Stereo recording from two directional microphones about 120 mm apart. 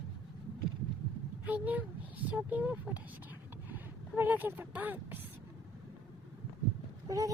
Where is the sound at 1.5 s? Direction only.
10° right (ahead or behind).